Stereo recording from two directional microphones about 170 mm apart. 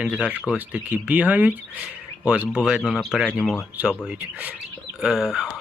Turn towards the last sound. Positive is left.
turn(degrees=0)  # may be behind; listen again after turning